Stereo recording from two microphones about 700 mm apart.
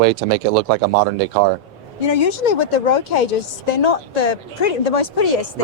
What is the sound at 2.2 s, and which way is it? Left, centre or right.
A woman's voice, left.